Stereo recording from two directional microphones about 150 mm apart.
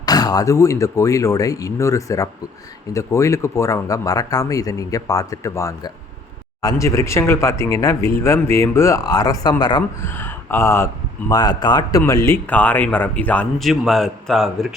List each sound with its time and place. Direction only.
0.0 s speech: 25° left (ahead or behind)
10.0 s speech: 15° left (ahead or behind)
11.3 s a man's voice: 25° left (ahead or behind); by 14.7 s centre (ahead or behind)